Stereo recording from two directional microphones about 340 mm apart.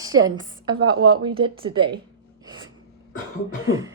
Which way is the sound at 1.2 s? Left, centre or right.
Centre.